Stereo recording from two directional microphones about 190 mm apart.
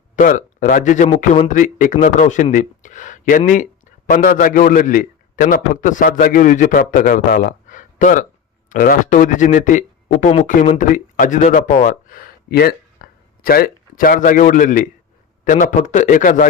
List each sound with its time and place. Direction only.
0.2 s a man's voice: 40° left (ahead or behind)